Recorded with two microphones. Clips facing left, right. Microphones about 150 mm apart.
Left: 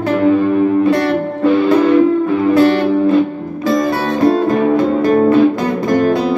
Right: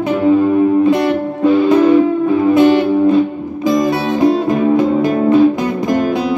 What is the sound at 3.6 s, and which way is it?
Music, 20° right (ahead or behind).